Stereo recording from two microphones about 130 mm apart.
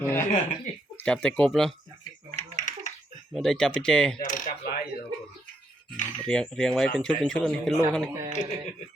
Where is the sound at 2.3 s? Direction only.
75° left (ahead or behind).